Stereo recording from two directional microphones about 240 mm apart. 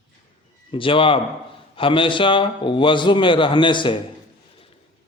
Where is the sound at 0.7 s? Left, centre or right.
Left.